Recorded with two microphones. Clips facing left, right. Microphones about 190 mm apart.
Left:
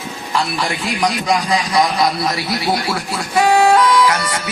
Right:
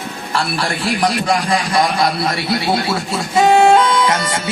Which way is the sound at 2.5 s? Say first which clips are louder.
Right 4 dB; 25° right (ahead or behind).